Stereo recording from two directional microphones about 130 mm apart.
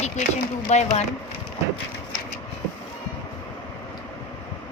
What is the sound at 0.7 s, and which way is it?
Speech, 60° left (ahead or behind).